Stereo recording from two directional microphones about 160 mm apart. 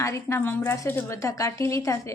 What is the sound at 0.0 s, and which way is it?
A woman's voice, 15° left (ahead or behind).